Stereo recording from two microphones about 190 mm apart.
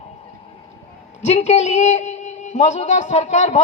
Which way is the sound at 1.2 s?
35° left (ahead or behind).